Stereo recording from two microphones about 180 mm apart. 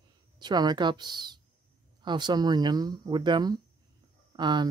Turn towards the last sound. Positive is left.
turn(degrees=-25)  # may be behind; listen again after turning